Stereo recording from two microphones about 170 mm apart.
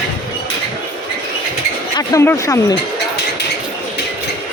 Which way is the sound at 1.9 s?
15° left (ahead or behind).